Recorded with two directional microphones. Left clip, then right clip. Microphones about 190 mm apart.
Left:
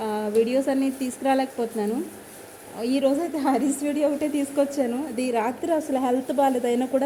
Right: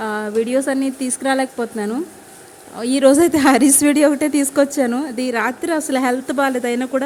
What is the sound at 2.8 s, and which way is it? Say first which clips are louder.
Speech: right 6 dB; 65° right (ahead or behind).